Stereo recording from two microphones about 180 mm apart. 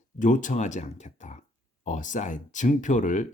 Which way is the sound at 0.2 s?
45° left (ahead or behind).